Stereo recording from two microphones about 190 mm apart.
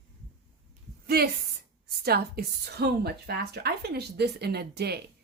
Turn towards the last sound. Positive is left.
turn(degrees=-60)  # may be behind; listen again after turning